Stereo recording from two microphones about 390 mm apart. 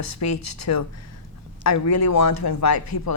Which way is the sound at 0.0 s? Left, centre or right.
Left.